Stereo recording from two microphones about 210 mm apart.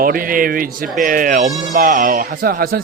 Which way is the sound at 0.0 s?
40° right (ahead or behind).